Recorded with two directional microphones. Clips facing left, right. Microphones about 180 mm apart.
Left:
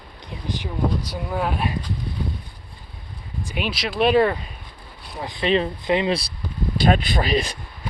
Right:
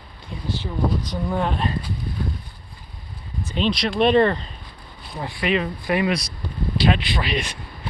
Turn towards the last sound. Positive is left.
turn(degrees=35)  # may be behind; listen again after turning